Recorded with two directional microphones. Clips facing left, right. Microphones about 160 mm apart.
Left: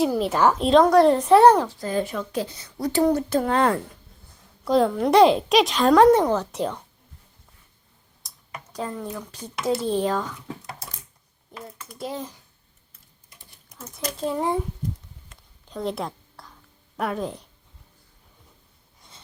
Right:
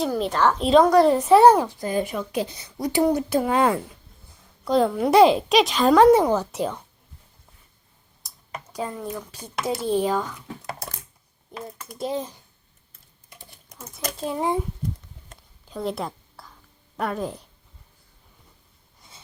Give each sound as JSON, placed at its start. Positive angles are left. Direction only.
{"t": 0.0, "sound": "a woman's voice", "side_deg": 5}
{"t": 8.2, "sound": "computer keyboard", "side_deg": 0}
{"t": 8.7, "sound": "speech", "side_deg": -10}
{"t": 11.9, "sound": "speech", "side_deg": -20}
{"t": 14.3, "sound": "speech", "side_deg": -10}
{"t": 15.7, "sound": "a sound", "side_deg": 0}
{"t": 17.0, "sound": "a woman's voice", "side_deg": 0}
{"t": 19.0, "sound": "a sound", "side_deg": -5}